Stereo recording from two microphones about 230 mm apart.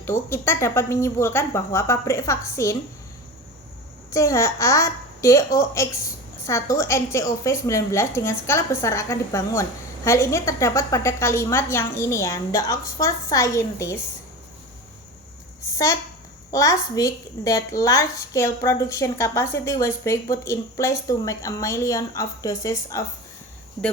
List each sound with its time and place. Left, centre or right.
0.0 s a woman's voice: centre
4.1 s a woman's voice: centre
16.5 s a woman's voice: centre